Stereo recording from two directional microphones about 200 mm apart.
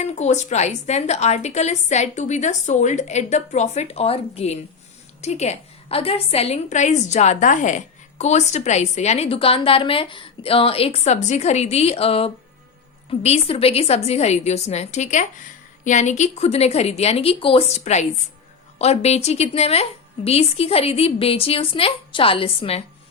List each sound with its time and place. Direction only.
0.0 s a woman's voice: 35° left (ahead or behind)